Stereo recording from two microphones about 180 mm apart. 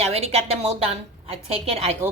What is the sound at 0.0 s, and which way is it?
A woman's voice, 35° right (ahead or behind).